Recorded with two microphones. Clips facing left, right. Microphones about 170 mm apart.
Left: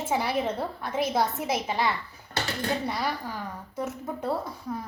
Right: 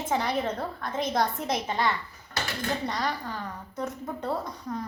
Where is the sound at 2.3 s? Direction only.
35° left (ahead or behind).